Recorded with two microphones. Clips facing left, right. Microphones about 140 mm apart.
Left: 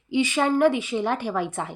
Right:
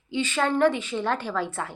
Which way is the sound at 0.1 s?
15° left (ahead or behind).